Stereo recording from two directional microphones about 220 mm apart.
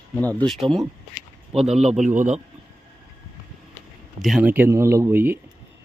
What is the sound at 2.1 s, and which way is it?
Speech, 35° right (ahead or behind).